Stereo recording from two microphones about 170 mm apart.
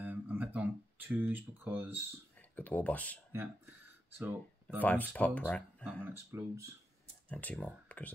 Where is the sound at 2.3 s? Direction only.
10° left (ahead or behind).